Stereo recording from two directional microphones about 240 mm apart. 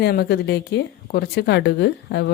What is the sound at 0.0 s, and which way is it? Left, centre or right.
A woman's voice, left.